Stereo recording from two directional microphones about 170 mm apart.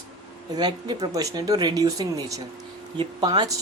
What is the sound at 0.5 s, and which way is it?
Speech, 25° right (ahead or behind).